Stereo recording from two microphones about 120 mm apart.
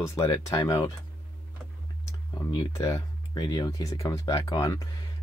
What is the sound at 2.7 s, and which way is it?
Speech, 30° left (ahead or behind).